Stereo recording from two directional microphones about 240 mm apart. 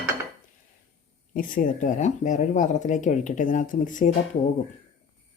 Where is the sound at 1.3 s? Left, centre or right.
Left.